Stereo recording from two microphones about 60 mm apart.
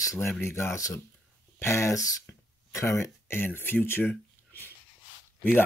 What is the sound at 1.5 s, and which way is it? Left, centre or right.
Speech, left.